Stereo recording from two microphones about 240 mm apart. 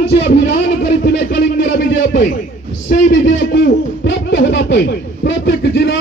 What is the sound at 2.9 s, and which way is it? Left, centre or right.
Hoot, left.